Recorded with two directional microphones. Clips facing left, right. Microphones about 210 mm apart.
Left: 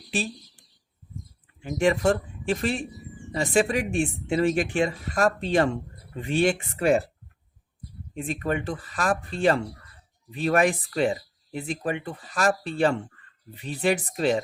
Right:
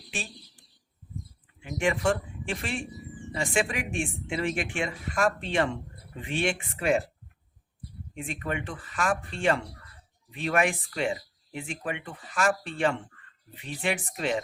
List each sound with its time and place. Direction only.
0.1 s a sound: 35° left (ahead or behind)
1.6 s speech: 40° left (ahead or behind)
8.1 s speech: 40° left (ahead or behind)